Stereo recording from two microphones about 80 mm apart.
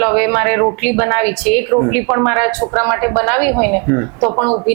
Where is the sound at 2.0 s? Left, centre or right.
Right.